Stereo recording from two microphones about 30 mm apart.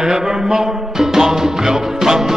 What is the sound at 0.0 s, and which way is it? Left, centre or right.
Music, centre.